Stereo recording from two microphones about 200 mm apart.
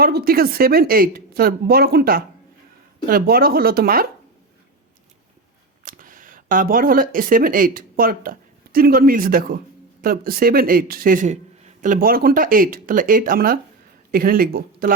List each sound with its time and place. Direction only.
0.0 s a man's voice: 50° right (ahead or behind)
5.8 s a man's voice: 45° right (ahead or behind)